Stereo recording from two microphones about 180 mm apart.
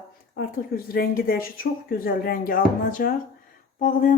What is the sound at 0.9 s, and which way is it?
A woman's voice, 55° left (ahead or behind).